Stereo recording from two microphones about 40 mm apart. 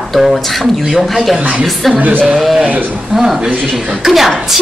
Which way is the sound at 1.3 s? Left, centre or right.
Right.